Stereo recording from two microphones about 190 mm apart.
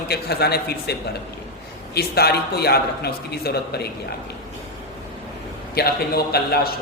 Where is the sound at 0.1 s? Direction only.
55° left (ahead or behind).